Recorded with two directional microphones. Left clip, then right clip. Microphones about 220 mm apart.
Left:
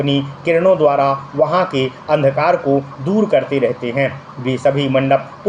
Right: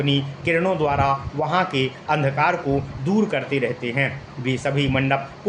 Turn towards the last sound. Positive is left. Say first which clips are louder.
# left 8 dB
turn(degrees=-20)  # may be behind; listen again after turning